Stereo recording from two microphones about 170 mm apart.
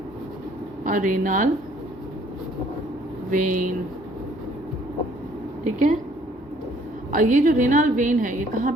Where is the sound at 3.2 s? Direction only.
50° right (ahead or behind).